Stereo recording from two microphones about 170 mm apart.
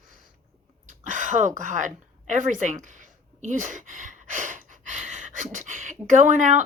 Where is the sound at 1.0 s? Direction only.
50° right (ahead or behind).